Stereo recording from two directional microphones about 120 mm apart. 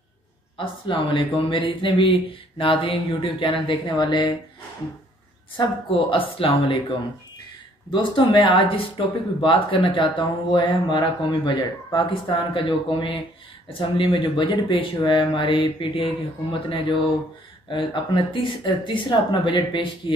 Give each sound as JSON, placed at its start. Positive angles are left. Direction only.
{"t": 0.6, "sound": "speech", "side_deg": 45}
{"t": 5.6, "sound": "speech", "side_deg": 45}
{"t": 7.9, "sound": "speech", "side_deg": 40}
{"t": 17.6, "sound": "speech", "side_deg": 45}